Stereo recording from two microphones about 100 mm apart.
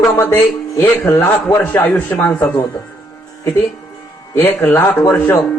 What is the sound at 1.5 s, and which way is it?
A man's voice, 20° left (ahead or behind).